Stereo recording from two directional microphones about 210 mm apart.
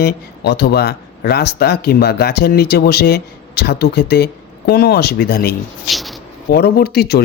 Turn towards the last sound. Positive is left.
turn(degrees=50)  # may be behind; listen again after turning